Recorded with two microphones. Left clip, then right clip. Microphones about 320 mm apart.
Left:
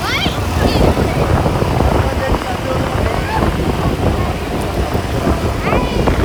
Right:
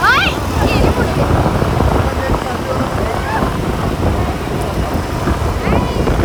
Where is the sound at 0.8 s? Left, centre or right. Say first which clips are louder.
Even; centre.